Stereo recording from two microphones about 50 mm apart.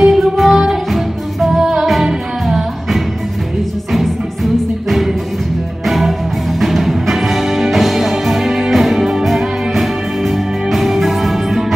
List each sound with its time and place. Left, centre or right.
0.0 s music: centre